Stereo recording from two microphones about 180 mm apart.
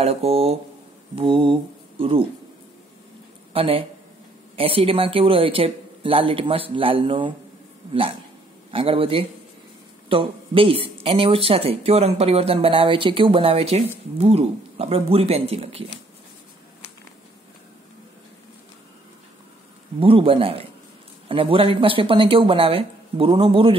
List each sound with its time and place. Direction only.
0.0 s speech: 35° right (ahead or behind)
1.1 s mantra: 30° right (ahead or behind)
3.5 s speech: 30° right (ahead or behind)
8.7 s speech: 30° right (ahead or behind)
20.0 s speech: 30° right (ahead or behind)